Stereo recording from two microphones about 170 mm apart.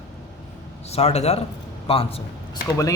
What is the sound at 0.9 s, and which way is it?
A man's voice, 40° left (ahead or behind).